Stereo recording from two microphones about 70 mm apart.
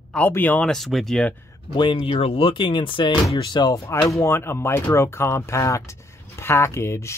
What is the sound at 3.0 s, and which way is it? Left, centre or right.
Speech, left.